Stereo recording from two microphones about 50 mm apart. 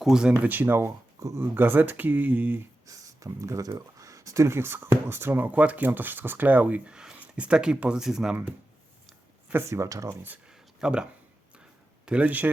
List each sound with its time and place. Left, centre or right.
0.0 s speech: centre
0.3 s speech: right
0.9 s speech: right
1.5 s speech: right
3.2 s speech: right
5.5 s speech: right; by 8.4 s centre
9.6 s speech: right
10.5 s a sound: centre
12.0 s speech: right